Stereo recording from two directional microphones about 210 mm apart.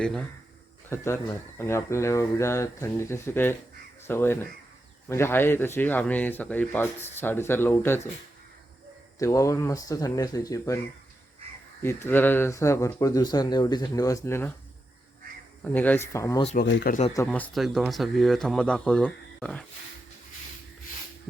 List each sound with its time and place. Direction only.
0.9 s speech: 15° left (ahead or behind)
9.1 s speech: 15° left (ahead or behind)
11.8 s speech: 10° left (ahead or behind)
15.6 s speech: 10° left (ahead or behind)
16.6 s speech: 45° left (ahead or behind)
17.2 s speech: 5° left (ahead or behind)